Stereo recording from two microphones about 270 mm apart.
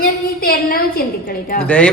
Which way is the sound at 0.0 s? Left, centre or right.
Left.